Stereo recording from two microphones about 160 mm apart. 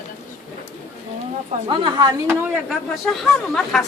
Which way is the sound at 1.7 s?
30° right (ahead or behind).